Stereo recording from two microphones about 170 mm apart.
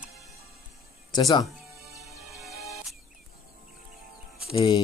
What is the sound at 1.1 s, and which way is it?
Speech, 25° left (ahead or behind).